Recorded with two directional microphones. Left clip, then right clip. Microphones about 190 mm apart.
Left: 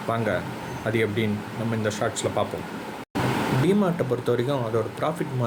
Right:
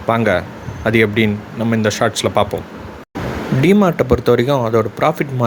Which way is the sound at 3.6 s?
45° right (ahead or behind).